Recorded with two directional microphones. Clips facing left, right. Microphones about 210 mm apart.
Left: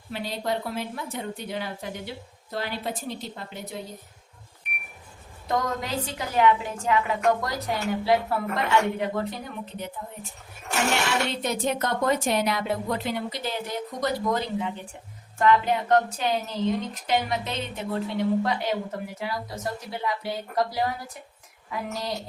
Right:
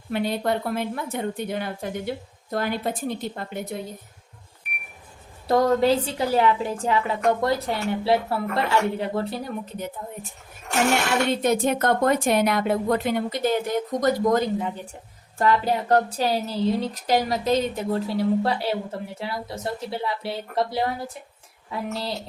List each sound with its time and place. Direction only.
0.1 s a woman's voice: 55° right (ahead or behind)
5.5 s a woman's voice: 35° right (ahead or behind)
11.0 s a woman's voice: 55° right (ahead or behind)
15.4 s a woman's voice: 35° right (ahead or behind)